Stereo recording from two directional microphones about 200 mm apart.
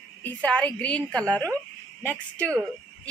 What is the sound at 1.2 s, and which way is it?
Speech, 15° right (ahead or behind).